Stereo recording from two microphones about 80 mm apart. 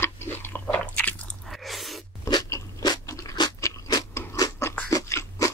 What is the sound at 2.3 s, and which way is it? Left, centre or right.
Crunch, left.